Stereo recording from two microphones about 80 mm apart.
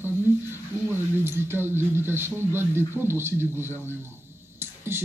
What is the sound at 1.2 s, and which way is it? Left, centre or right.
Speech, right.